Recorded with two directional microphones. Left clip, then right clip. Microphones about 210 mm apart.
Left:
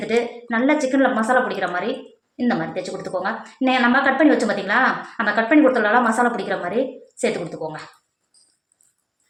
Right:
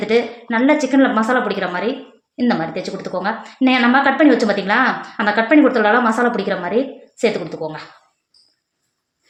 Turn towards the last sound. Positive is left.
turn(degrees=-45)  # may be behind; listen again after turning